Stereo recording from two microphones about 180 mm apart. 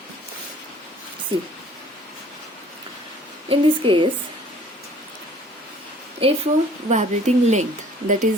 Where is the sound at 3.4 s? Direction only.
30° right (ahead or behind).